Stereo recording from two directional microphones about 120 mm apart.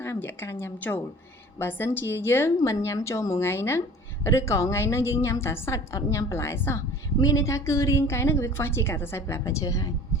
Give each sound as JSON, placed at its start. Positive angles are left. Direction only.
{"t": 0.0, "sound": "a woman's voice", "side_deg": 20}